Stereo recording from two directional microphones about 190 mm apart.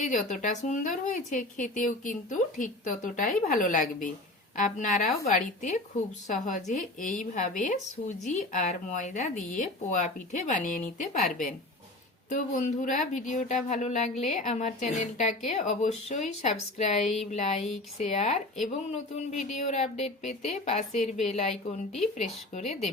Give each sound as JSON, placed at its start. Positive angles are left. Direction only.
{"t": 0.1, "sound": "speech", "side_deg": 40}
{"t": 12.3, "sound": "speech", "side_deg": 40}
{"t": 21.5, "sound": "speech", "side_deg": 0}
{"t": 22.5, "sound": "speech", "side_deg": 35}